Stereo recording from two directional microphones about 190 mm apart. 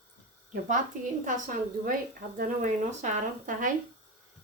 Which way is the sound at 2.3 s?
40° right (ahead or behind).